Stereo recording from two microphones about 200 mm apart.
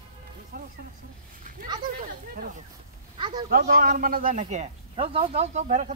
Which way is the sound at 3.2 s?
25° right (ahead or behind).